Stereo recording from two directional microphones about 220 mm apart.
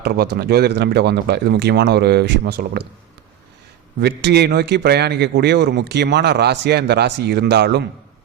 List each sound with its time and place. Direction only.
0.0 s a man's voice: 45° right (ahead or behind)
4.0 s a man's voice: 50° right (ahead or behind)